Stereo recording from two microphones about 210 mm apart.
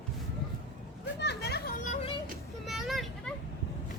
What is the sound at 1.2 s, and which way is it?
Children playing, 55° left (ahead or behind).